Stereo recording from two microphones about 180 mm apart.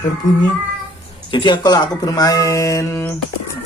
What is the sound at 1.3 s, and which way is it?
Speech, 25° left (ahead or behind).